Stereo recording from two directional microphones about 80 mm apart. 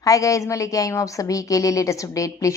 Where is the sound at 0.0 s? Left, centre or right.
Left.